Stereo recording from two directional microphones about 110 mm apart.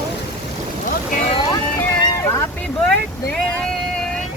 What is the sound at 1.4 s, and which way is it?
Speech, 35° left (ahead or behind).